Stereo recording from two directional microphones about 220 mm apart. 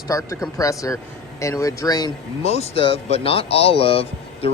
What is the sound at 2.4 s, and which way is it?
Speech, 30° left (ahead or behind).